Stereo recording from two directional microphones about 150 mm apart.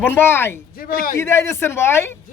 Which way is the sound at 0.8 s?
75° left (ahead or behind).